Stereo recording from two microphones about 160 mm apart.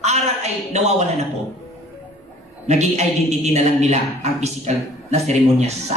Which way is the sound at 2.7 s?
45° right (ahead or behind).